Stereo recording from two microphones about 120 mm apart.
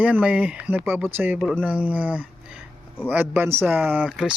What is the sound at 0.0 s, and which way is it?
Speech, 10° right (ahead or behind).